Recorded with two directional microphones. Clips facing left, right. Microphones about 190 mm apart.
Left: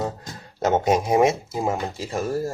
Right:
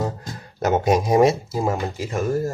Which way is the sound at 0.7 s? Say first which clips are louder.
Right 1 dB; 20° left (ahead or behind).